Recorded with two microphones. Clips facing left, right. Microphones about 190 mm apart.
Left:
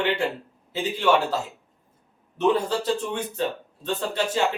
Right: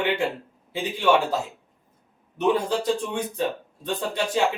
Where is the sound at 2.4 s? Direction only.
15° right (ahead or behind).